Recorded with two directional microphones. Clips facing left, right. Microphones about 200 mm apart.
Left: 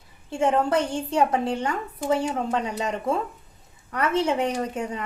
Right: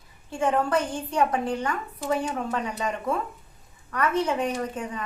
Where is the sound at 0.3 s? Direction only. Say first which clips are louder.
Left 2 dB; 25° left (ahead or behind).